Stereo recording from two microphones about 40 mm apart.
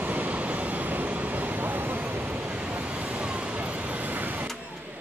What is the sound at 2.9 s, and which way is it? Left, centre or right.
Vehicle, right.